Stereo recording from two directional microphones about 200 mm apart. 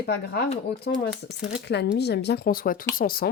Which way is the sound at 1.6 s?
55° left (ahead or behind).